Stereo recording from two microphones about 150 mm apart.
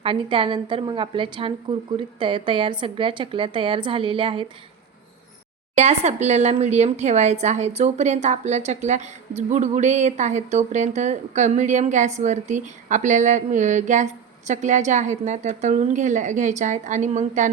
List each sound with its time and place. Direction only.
0.0 s a woman's voice: 35° right (ahead or behind)
5.7 s a woman's voice: 45° right (ahead or behind)